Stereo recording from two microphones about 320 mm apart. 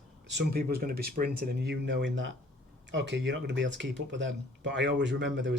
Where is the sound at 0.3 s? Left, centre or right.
Right.